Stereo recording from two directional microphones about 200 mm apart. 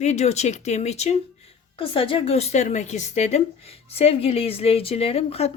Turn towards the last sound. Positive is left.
turn(degrees=30)  # may be behind; listen again after turning